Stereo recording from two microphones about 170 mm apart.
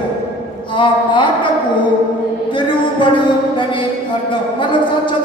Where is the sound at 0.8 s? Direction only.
30° left (ahead or behind).